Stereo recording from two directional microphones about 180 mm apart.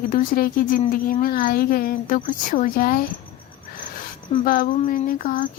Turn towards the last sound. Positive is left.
turn(degrees=45)  # may be behind; listen again after turning